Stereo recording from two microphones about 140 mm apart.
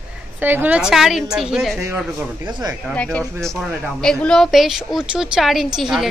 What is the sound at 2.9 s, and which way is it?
A woman's voice, 10° left (ahead or behind).